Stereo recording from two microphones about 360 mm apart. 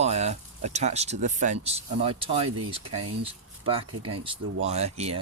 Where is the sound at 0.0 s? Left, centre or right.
Centre.